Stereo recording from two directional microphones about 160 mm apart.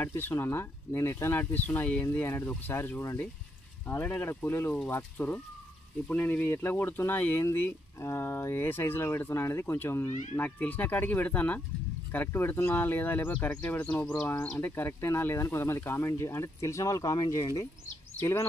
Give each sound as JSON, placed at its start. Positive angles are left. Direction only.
{"t": 0.0, "sound": "speech", "side_deg": 15}